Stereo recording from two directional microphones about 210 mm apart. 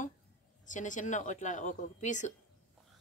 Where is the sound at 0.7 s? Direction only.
35° left (ahead or behind).